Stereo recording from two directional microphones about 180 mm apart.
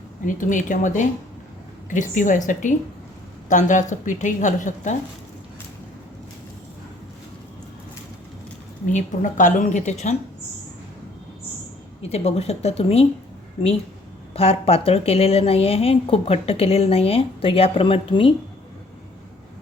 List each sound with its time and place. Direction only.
0.3 s a woman's voice: 45° left (ahead or behind)
8.9 s a woman's voice: 45° left (ahead or behind)
12.0 s a woman's voice: 35° left (ahead or behind)
14.3 s a woman's voice: 35° left (ahead or behind)